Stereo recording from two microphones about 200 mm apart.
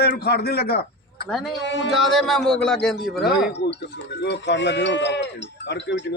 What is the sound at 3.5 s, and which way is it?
Speech, 60° left (ahead or behind).